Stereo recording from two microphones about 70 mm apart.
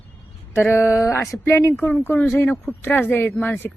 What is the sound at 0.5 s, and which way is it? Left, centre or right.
Speech, left.